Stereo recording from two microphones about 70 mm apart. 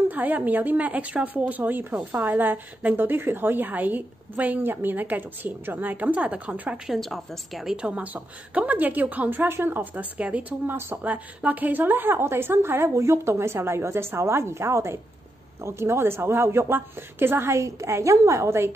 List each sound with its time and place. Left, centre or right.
0.1 s a woman's voice: right
6.9 s a woman's voice: centre
7.7 s a woman's voice: centre; by 17.6 s right
17.6 s a woman's voice: right